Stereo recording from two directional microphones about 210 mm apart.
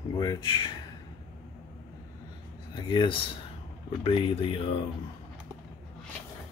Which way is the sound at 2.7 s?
20° left (ahead or behind).